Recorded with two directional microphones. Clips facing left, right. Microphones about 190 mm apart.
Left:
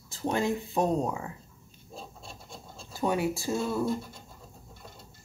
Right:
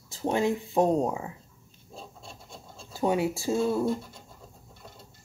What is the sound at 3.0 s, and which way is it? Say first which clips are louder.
Speech: right 2 dB; 25° right (ahead or behind).